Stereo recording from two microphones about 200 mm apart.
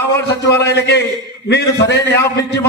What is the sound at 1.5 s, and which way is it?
Speech, 60° left (ahead or behind).